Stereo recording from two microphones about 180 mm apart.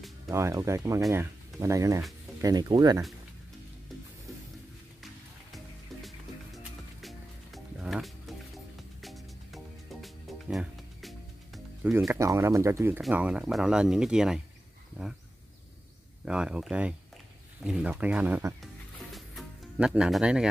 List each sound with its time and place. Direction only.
0.3 s speech: 15° right (ahead or behind)
6.0 s music: centre (ahead or behind)
11.9 s speech: 15° right (ahead or behind)
16.3 s speech: 5° right (ahead or behind)
18.6 s music: centre (ahead or behind)